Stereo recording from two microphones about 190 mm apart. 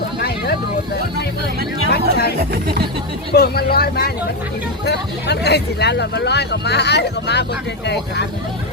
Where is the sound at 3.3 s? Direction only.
55° left (ahead or behind).